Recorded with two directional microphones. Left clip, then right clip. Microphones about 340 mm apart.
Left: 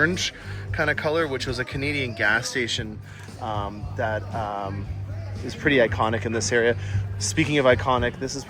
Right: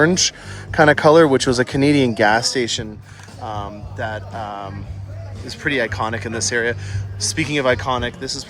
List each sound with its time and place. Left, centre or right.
0.0 s speech: centre
3.4 s music: centre